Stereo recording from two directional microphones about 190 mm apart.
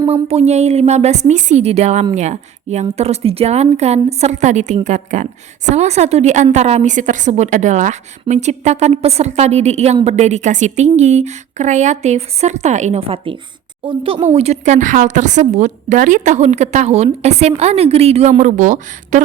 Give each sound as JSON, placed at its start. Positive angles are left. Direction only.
{"t": 0.1, "sound": "a woman's voice", "side_deg": -30}